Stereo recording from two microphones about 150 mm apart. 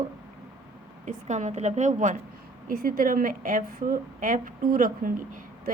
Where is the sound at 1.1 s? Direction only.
55° right (ahead or behind).